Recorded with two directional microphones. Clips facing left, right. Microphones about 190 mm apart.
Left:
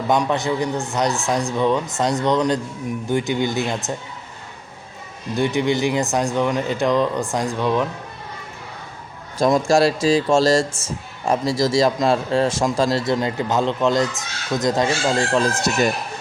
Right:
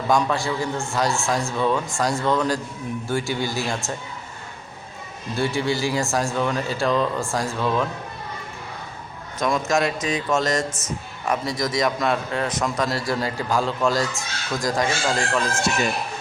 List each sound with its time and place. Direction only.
0.1 s speech: 20° left (ahead or behind)
5.3 s speech: 20° left (ahead or behind)
9.4 s speech: 30° left (ahead or behind)